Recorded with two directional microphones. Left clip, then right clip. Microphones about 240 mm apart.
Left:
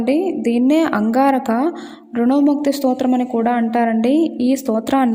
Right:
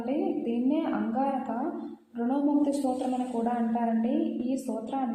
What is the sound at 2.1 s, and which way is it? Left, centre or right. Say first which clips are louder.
A woman's voice: left 12 dB; left.